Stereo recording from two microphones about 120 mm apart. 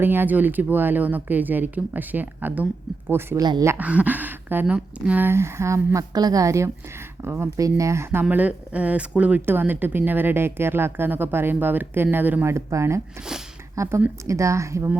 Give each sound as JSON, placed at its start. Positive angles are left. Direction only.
{"t": 0.0, "sound": "speech", "side_deg": -15}